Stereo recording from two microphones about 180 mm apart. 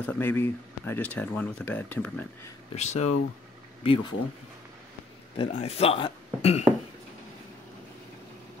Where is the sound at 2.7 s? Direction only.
40° left (ahead or behind).